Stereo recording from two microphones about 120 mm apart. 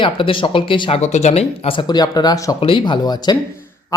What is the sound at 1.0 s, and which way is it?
A woman's voice, 70° left (ahead or behind).